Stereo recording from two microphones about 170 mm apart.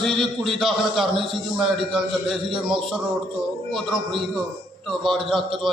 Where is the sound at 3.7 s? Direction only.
Centre (ahead or behind).